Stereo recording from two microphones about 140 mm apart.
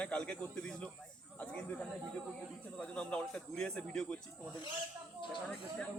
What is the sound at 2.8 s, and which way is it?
A man's voice, 5° left (ahead or behind).